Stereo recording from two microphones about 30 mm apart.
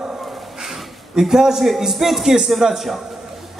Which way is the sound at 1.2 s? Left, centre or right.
Centre.